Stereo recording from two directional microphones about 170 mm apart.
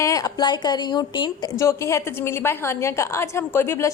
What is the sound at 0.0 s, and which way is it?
A woman's voice, 20° left (ahead or behind).